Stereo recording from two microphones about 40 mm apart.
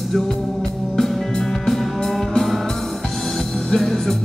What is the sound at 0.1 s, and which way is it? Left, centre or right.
Music, centre.